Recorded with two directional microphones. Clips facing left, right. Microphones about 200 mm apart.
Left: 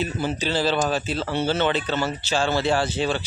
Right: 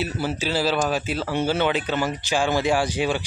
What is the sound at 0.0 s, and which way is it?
Speech, 5° right (ahead or behind).